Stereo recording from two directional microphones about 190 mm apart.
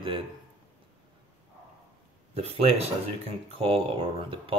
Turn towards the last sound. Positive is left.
turn(degrees=-30)  # may be behind; listen again after turning